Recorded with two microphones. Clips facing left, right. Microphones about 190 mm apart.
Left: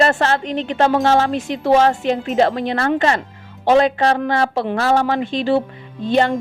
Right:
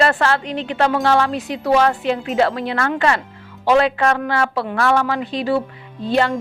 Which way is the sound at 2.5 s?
35° left (ahead or behind).